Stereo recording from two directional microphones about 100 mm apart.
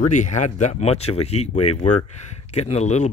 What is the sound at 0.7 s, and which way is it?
Speech, 90° left.